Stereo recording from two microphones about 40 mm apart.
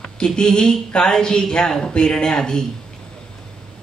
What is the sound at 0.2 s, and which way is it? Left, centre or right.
Speech, centre.